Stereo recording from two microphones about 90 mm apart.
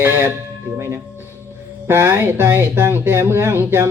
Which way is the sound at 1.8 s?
25° right (ahead or behind).